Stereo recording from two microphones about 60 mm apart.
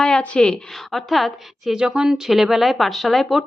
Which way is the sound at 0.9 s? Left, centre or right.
Centre.